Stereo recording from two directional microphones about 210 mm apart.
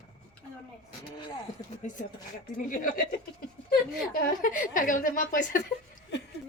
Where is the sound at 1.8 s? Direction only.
35° left (ahead or behind).